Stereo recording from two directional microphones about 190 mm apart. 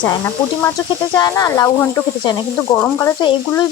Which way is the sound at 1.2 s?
20° left (ahead or behind).